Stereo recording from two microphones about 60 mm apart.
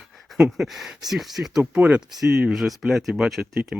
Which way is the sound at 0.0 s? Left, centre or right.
Centre.